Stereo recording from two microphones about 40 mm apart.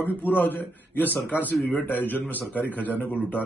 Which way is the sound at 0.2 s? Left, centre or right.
Left.